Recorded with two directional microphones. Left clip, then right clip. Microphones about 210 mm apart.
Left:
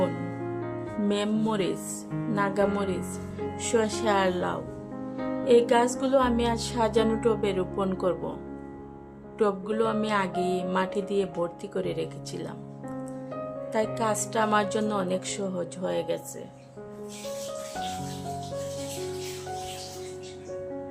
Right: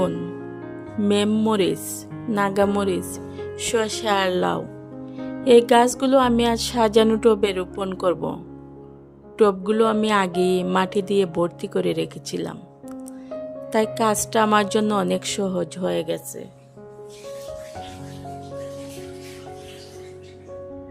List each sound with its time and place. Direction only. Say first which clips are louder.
1.0 s music: right 8 dB; 45° right (ahead or behind)
9.4 s music: right 8 dB; 45° right (ahead or behind)
13.7 s music: right 7 dB; 45° right (ahead or behind)